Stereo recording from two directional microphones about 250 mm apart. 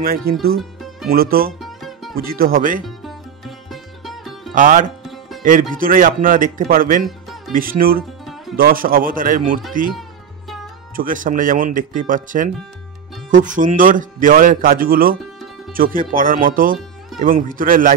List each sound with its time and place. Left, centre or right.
0.0 s a man's voice: right
1.6 s music: centre
2.1 s a man's voice: right
3.0 s sitar: centre
4.6 s a man's voice: right
5.0 s music: centre
5.4 s a man's voice: right
7.1 s music: centre
7.5 s a man's voice: right
11.0 s a man's voice: right